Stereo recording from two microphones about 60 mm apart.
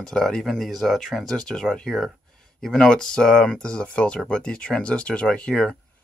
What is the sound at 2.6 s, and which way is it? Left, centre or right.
Speech, centre.